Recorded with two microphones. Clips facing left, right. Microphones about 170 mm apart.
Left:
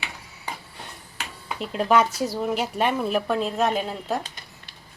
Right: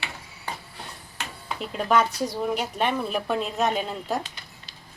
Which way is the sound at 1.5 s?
Centre (ahead or behind).